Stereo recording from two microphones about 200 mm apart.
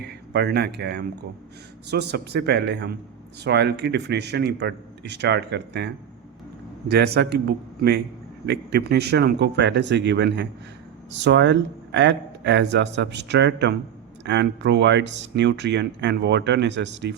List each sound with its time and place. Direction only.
0.0 s speech: 55° right (ahead or behind)